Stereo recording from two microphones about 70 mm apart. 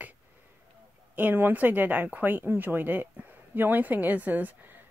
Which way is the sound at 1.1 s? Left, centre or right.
Right.